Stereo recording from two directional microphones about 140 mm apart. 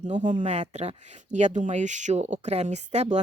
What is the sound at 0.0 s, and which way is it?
Speech, 60° right (ahead or behind).